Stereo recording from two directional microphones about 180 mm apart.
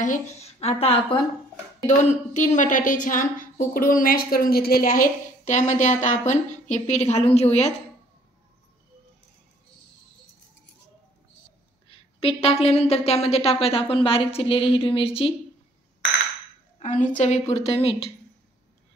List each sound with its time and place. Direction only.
0.0 s a woman's voice: 40° left (ahead or behind)
1.9 s a woman's voice: 45° left (ahead or behind)
11.9 s a woman's voice: 30° left (ahead or behind)
16.8 s a woman's voice: 45° left (ahead or behind)